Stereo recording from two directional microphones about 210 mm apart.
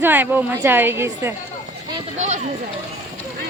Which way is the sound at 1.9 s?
30° right (ahead or behind).